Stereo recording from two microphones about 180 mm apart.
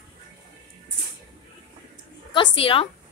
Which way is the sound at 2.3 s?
30° left (ahead or behind).